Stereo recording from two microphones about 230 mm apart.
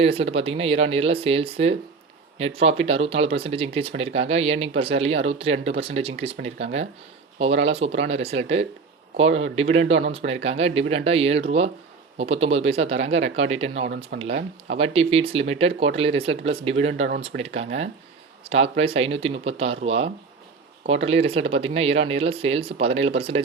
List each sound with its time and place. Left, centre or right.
0.0 s speech: right
14.1 s speech: right
14.7 s speech: right